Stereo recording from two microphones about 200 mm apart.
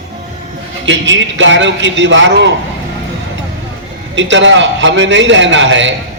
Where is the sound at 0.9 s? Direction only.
65° right (ahead or behind).